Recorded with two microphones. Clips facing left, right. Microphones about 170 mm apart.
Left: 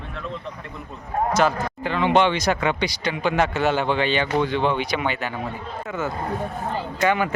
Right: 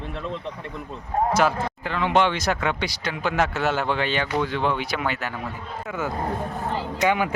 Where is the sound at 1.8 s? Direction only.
Centre (ahead or behind).